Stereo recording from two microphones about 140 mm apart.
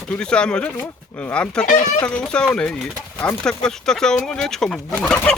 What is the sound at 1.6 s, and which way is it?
Speech, 70° left (ahead or behind).